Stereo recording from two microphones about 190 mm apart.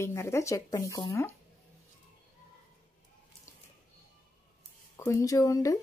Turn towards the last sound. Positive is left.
turn(degrees=15)  # may be behind; listen again after turning